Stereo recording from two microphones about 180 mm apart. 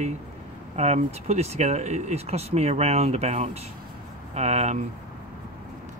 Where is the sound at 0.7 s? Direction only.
40° right (ahead or behind).